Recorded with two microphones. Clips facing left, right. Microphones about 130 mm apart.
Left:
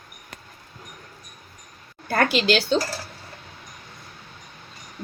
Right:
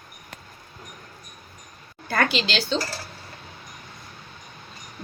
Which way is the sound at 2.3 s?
55° left (ahead or behind).